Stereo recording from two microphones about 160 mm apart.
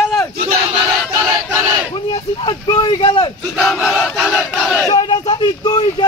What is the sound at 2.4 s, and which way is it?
Speech, 30° left (ahead or behind).